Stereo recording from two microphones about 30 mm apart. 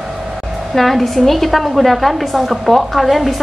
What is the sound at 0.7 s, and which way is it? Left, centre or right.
A woman's voice, centre.